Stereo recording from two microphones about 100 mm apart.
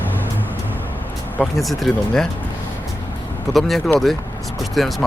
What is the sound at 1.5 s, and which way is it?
Speech, centre (ahead or behind).